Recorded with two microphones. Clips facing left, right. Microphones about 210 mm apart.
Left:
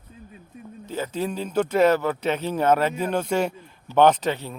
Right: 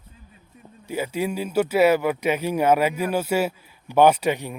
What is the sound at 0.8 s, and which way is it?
Speech, 10° right (ahead or behind).